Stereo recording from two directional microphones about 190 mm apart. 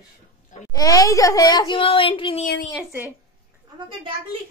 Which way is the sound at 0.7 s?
20° left (ahead or behind).